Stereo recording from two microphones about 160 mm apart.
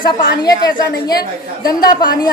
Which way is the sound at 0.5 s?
25° left (ahead or behind).